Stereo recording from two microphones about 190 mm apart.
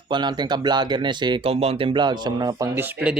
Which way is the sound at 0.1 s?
25° right (ahead or behind).